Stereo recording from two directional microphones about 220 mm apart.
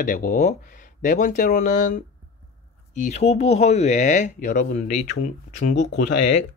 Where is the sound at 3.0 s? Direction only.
30° left (ahead or behind).